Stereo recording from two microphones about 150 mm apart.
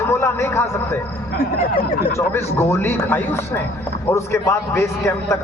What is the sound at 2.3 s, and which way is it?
A man's voice, 15° left (ahead or behind).